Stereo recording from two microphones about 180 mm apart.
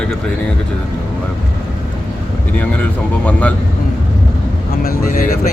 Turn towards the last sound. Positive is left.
turn(degrees=50)  # may be behind; listen again after turning